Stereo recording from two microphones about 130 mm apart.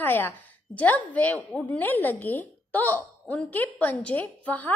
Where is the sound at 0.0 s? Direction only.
15° left (ahead or behind).